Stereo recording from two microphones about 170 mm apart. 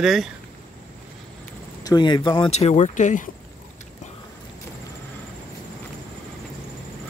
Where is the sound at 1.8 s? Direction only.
25° left (ahead or behind); by 3.3 s 45° left (ahead or behind).